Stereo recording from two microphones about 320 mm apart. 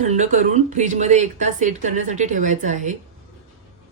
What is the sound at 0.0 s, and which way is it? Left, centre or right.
A woman's voice, right.